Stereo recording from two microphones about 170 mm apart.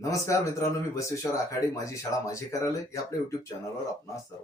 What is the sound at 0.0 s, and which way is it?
Speech, 20° left (ahead or behind).